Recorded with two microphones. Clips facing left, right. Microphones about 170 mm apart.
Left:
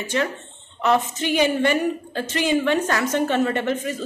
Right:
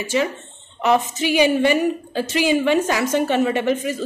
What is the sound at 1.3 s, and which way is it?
A woman's voice, 10° right (ahead or behind).